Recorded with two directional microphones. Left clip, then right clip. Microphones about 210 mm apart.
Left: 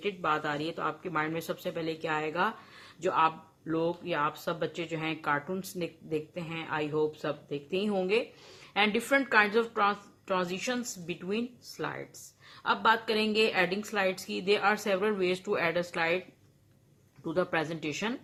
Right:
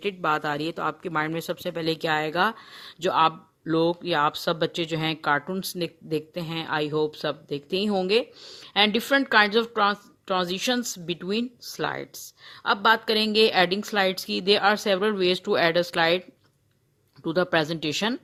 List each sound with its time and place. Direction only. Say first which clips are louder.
0.0 s speech: right 5 dB; 50° right (ahead or behind)
17.2 s speech: right 7 dB; 40° right (ahead or behind)